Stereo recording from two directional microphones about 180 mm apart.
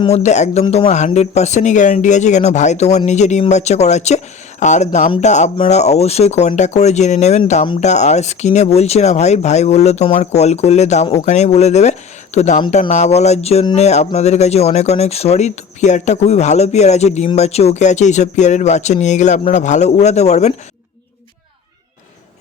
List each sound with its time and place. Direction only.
0.0 s speech: 35° left (ahead or behind)